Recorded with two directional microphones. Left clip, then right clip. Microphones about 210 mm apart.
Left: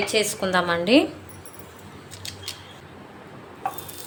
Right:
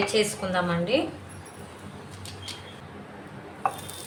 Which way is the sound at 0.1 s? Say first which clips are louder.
Left 3 dB; 45° left (ahead or behind).